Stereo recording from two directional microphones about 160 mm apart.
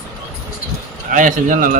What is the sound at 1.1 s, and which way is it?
Speech, 55° right (ahead or behind).